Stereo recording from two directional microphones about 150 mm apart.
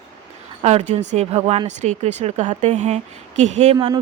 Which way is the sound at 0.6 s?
50° right (ahead or behind).